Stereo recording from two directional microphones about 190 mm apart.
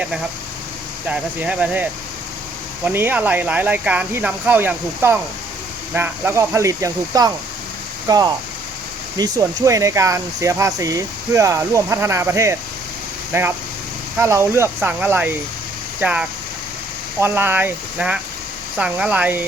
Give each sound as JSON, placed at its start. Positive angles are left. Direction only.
{"t": 1.0, "sound": "speech", "side_deg": -5}